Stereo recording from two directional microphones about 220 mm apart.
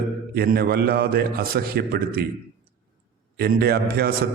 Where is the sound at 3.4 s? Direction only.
45° right (ahead or behind).